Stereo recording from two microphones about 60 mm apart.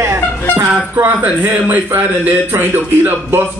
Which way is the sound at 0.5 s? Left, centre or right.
Right.